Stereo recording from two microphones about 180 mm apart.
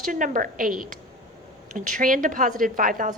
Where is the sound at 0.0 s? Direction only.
50° right (ahead or behind).